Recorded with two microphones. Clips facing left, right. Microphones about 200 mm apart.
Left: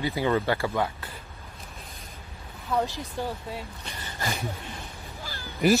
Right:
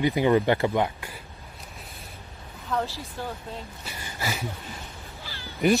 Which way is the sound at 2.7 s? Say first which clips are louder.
Left 2 dB; 15° left (ahead or behind).